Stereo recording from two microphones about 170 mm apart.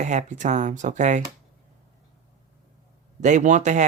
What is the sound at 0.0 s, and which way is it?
Speech, 45° right (ahead or behind).